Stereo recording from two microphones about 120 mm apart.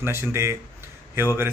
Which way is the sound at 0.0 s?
20° right (ahead or behind).